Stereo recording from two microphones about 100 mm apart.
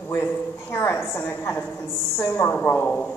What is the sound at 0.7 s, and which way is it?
A woman's voice, 20° left (ahead or behind).